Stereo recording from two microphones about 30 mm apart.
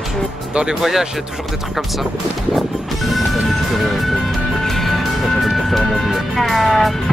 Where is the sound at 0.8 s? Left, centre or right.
Centre.